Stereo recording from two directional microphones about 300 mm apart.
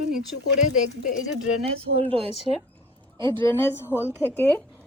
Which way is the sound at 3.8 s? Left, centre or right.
Centre.